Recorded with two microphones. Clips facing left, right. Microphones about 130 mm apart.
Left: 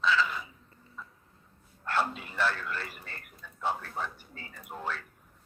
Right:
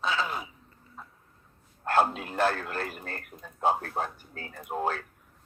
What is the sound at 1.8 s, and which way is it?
Speech, 45° right (ahead or behind).